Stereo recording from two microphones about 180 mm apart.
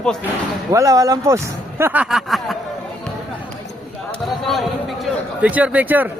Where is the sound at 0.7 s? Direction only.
20° right (ahead or behind); by 2.6 s centre (ahead or behind).